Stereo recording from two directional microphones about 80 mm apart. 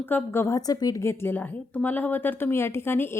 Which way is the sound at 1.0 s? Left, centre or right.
Left.